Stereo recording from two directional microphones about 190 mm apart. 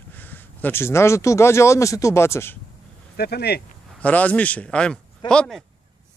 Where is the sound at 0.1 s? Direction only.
10° left (ahead or behind).